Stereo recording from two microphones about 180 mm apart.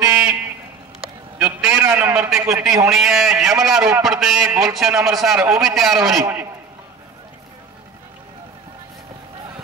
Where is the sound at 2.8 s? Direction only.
Centre (ahead or behind).